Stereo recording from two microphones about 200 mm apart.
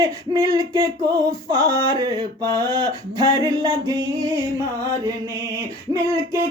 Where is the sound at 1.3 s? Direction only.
20° right (ahead or behind).